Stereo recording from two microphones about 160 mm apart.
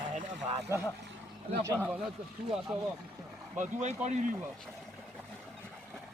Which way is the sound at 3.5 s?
45° right (ahead or behind).